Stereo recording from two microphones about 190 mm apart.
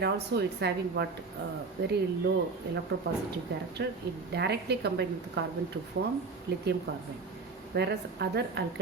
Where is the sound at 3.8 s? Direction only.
60° right (ahead or behind).